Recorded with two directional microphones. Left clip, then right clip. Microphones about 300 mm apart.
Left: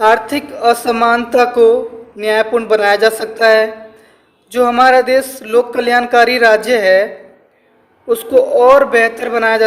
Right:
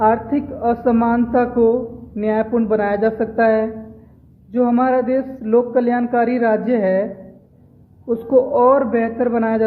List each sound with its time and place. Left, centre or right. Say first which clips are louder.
0.0 s speech: left 5 dB; centre
8.1 s speech: left 4 dB; centre